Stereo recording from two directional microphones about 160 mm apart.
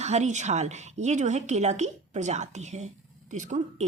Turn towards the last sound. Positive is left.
turn(degrees=-45)  # may be behind; listen again after turning